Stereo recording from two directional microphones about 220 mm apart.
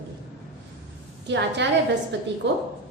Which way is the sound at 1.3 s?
55° right (ahead or behind).